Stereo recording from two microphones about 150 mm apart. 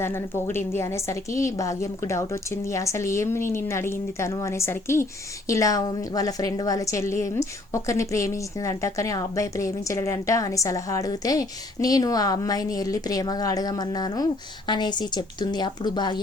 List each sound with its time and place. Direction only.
0.0 s a woman's voice: 15° left (ahead or behind)